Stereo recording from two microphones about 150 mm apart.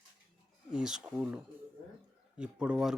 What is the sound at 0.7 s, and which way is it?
Speech, 5° right (ahead or behind).